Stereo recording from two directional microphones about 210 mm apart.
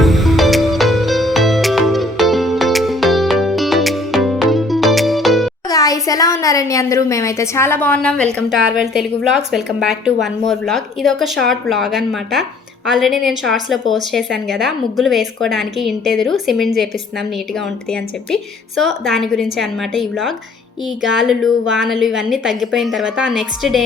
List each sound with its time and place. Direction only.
0.0 s music: centre (ahead or behind)
5.6 s a woman's voice: 15° left (ahead or behind); by 16.9 s centre (ahead or behind)
18.8 s a woman's voice: centre (ahead or behind)